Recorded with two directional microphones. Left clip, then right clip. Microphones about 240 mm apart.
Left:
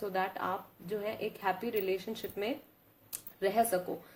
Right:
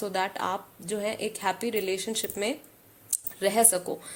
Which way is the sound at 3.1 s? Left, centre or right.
Right.